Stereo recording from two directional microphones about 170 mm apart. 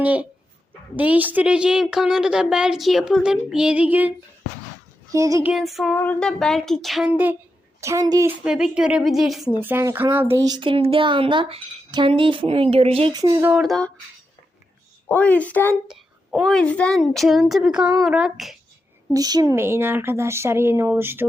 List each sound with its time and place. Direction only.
0.0 s a woman's voice: 10° right (ahead or behind)
5.1 s speech: 20° right (ahead or behind)
5.5 s a woman's voice: centre (ahead or behind); by 8.3 s 20° right (ahead or behind)
8.4 s a woman's voice: 5° right (ahead or behind)
9.6 s speech: 15° right (ahead or behind); by 13.1 s 35° right (ahead or behind)
13.1 s speech: 20° right (ahead or behind)
13.5 s a woman's voice: centre (ahead or behind)
15.0 s speech: 10° left (ahead or behind)
15.9 s a woman's voice: centre (ahead or behind)
19.1 s speech: 20° right (ahead or behind)